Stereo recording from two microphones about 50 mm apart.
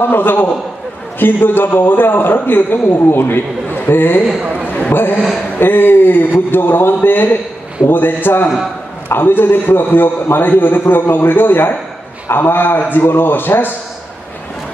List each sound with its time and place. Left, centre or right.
0.0 s a man's voice: left
4.3 s a man's voice: centre
4.6 s a sound: left
4.9 s a man's voice: left